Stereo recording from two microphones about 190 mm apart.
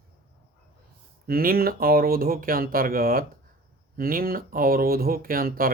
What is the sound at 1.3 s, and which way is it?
Speech, 50° right (ahead or behind).